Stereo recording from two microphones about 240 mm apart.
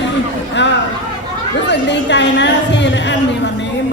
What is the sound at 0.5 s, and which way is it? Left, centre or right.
A woman's voice, left.